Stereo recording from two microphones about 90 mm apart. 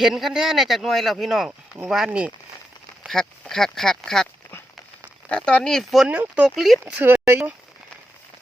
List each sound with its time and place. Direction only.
0.0 s a man's voice: centre (ahead or behind)
2.0 s speech: 15° right (ahead or behind)
3.1 s a man's voice: 5° left (ahead or behind)
5.3 s speech: 10° left (ahead or behind)
6.1 s speech: 15° right (ahead or behind)
6.6 s a man's voice: centre (ahead or behind)
7.0 s speech: 25° right (ahead or behind)